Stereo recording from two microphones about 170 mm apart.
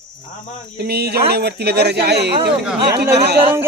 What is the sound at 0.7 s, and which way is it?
Speech, 70° right (ahead or behind).